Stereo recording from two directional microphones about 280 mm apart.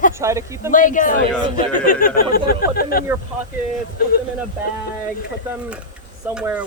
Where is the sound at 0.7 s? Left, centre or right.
Left.